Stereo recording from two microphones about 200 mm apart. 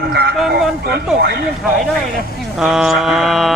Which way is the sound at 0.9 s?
55° right (ahead or behind).